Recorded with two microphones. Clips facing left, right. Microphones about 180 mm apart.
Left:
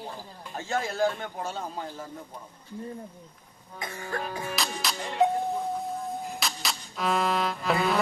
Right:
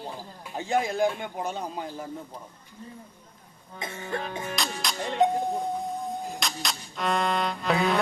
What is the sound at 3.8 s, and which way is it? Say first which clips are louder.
Music: right 1 dB; 25° right (ahead or behind).